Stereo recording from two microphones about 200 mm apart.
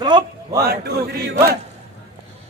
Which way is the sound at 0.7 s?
50° right (ahead or behind).